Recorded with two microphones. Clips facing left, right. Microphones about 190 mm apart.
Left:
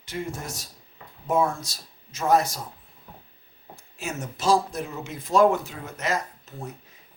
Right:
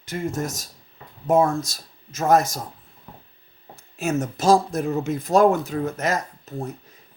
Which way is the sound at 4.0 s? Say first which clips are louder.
Right 9 dB; 45° right (ahead or behind).